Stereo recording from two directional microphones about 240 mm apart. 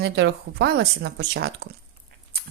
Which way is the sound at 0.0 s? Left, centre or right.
Right.